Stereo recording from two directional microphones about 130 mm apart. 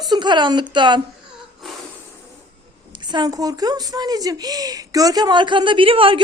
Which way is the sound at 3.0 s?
35° right (ahead or behind).